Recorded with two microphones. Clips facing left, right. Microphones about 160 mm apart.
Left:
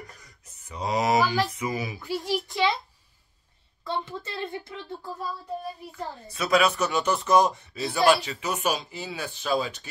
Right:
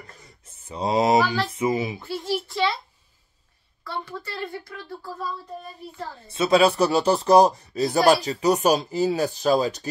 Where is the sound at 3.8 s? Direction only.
20° left (ahead or behind).